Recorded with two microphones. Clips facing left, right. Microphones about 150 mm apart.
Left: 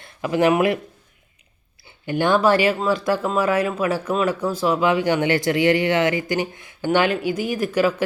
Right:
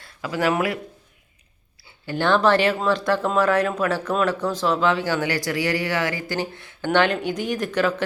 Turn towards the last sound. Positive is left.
turn(degrees=10)  # may be behind; listen again after turning